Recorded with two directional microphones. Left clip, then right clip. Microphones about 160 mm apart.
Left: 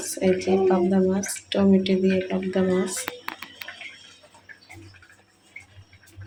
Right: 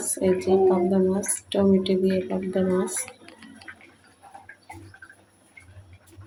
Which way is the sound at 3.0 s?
90° left.